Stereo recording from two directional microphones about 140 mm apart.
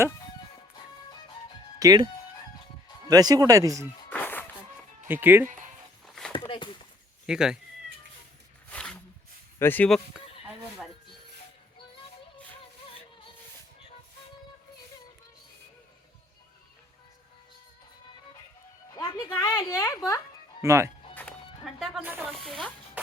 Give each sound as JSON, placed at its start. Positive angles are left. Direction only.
{"t": 1.8, "sound": "speech", "side_deg": -30}
{"t": 3.1, "sound": "speech", "side_deg": -25}
{"t": 4.1, "sound": "music", "side_deg": 15}
{"t": 5.0, "sound": "speech", "side_deg": -15}
{"t": 6.1, "sound": "a sound", "side_deg": 5}
{"t": 6.5, "sound": "a sound", "side_deg": 35}
{"t": 7.3, "sound": "speech", "side_deg": -5}
{"t": 8.7, "sound": "a sound", "side_deg": 5}
{"t": 9.6, "sound": "speech", "side_deg": 15}
{"t": 18.9, "sound": "a sound", "side_deg": 25}
{"t": 20.6, "sound": "speech", "side_deg": -20}
{"t": 21.6, "sound": "music", "side_deg": 0}
{"t": 22.2, "sound": "snake", "side_deg": 0}